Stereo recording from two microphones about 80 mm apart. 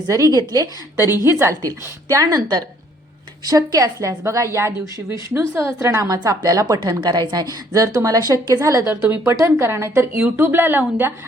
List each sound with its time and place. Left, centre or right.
0.3 s speech: right
0.9 s a woman's voice: right
1.6 s a woman's voice: right
6.2 s speech: right
7.7 s a woman's voice: right